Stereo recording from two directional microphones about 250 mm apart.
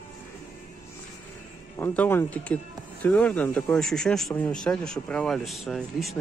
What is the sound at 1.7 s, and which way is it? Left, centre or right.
Speech, centre.